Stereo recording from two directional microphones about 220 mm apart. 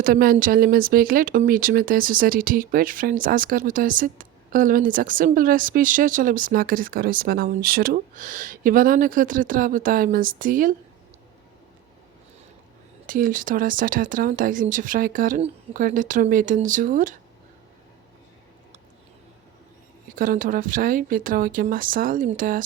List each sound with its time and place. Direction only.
0.0 s speech: 40° right (ahead or behind)
13.1 s speech: 40° right (ahead or behind)
20.1 s speech: 40° right (ahead or behind)